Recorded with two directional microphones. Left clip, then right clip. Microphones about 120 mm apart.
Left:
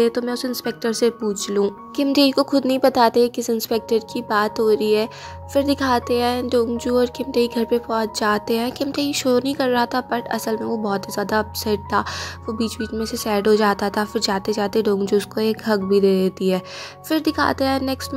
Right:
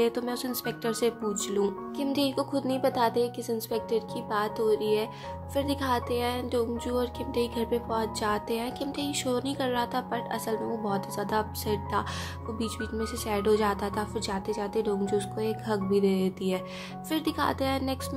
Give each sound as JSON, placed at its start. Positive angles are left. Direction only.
{"t": 0.0, "sound": "speech", "side_deg": 35}
{"t": 2.1, "sound": "a woman's voice", "side_deg": 70}